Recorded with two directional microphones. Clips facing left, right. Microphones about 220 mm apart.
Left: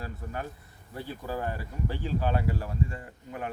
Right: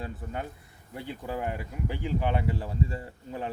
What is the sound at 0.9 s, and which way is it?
Speech, 15° right (ahead or behind).